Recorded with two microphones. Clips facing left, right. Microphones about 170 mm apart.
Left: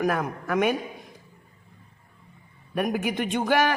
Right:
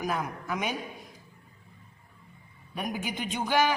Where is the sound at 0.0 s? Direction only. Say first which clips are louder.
Left 6 dB; 60° left (ahead or behind).